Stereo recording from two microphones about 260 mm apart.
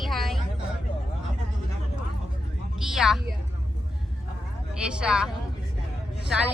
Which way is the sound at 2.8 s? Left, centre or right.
Centre.